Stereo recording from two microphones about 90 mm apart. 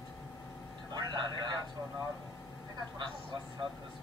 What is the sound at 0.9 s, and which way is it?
Vehicle, 55° right (ahead or behind).